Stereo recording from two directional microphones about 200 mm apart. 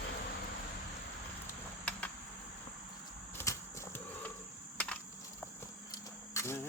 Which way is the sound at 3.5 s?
15° left (ahead or behind).